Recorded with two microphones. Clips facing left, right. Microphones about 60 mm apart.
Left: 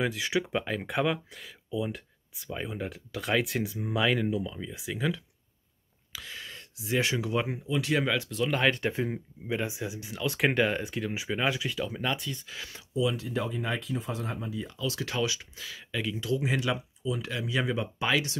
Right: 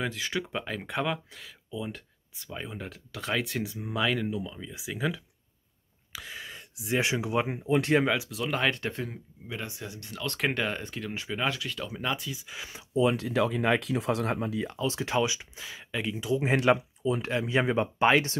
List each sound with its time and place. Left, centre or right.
0.0 s speech: centre; by 7.6 s right
7.6 s speech: right
8.1 s speech: centre
11.8 s speech: centre
12.5 s speech: centre
13.1 s speech: right
14.9 s speech: right
16.4 s speech: right